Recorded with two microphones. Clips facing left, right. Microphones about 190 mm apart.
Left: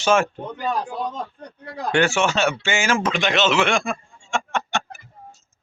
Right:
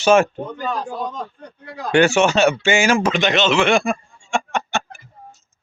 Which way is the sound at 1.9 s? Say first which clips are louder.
Right 5 dB; 15° right (ahead or behind).